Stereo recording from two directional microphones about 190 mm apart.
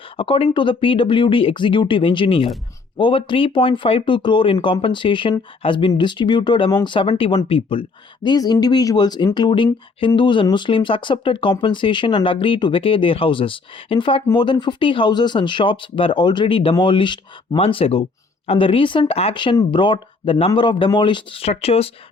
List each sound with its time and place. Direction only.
0.2 s speech: 30° left (ahead or behind)